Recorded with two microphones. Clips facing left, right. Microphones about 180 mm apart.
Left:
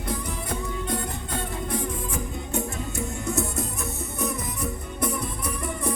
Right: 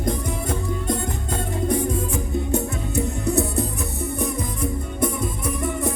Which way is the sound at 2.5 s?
35° right (ahead or behind).